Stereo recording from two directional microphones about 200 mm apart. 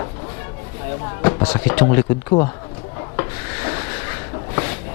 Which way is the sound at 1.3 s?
25° left (ahead or behind).